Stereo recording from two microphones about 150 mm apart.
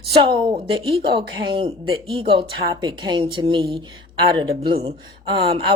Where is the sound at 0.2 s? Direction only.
35° right (ahead or behind).